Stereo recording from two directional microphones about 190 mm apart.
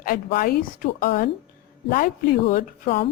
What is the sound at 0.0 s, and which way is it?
A woman's voice, 50° left (ahead or behind).